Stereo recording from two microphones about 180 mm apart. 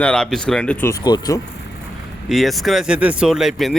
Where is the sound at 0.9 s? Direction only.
20° left (ahead or behind).